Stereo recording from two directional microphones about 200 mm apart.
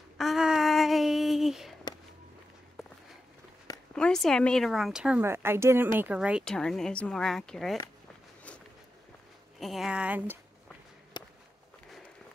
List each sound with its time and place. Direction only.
0.2 s a sound: centre (ahead or behind)
3.9 s a woman's voice: 5° left (ahead or behind)
9.6 s a woman's voice: centre (ahead or behind)
11.1 s walk: 20° left (ahead or behind)